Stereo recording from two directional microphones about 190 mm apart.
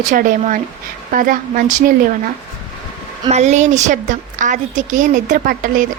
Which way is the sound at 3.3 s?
35° right (ahead or behind).